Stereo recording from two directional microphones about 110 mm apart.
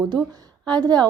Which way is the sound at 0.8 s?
40° right (ahead or behind).